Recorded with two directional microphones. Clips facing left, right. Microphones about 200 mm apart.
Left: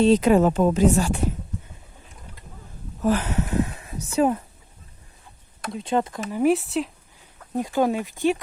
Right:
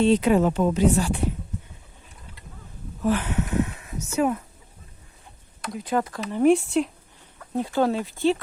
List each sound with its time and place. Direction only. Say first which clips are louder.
0.0 s speech: left 2 dB; 40° left (ahead or behind)
3.0 s a sound: left 1 dB; 40° left (ahead or behind)
5.7 s speech: left 2 dB; 25° left (ahead or behind)
6.3 s speech: right 2 dB; 5° left (ahead or behind)
7.5 s speech: left 1 dB; 15° left (ahead or behind)